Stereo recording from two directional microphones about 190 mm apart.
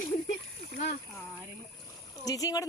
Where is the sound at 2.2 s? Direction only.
20° left (ahead or behind).